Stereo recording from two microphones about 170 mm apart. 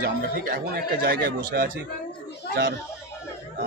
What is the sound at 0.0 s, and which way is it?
Speech, 60° right (ahead or behind).